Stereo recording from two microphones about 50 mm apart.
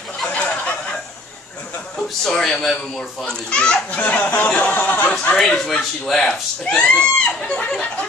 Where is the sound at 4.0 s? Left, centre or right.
Left.